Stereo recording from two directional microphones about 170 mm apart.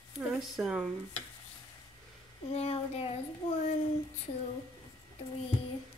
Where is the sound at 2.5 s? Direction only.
40° left (ahead or behind).